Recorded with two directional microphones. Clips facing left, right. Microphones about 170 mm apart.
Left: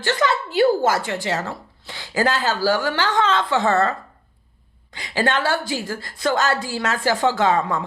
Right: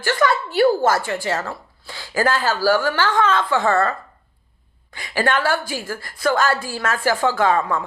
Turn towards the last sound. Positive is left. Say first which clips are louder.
# right 1 dB
turn(degrees=20)  # may be behind; listen again after turning